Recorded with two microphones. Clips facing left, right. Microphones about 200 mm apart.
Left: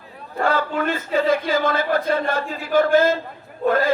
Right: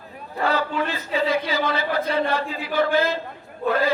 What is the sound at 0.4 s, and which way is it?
Speech, 50° left (ahead or behind).